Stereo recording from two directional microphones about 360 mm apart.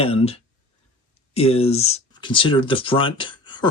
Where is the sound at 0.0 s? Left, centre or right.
Centre.